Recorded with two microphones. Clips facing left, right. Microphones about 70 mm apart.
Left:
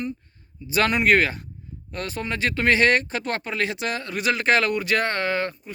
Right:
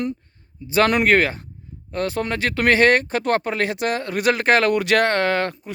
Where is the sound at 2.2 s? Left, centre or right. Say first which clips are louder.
Even; right.